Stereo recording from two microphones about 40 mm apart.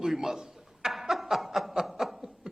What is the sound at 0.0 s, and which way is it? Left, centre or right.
Chuckle, centre.